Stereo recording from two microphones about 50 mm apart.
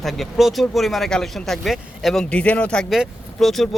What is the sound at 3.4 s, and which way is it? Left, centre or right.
Speech, centre.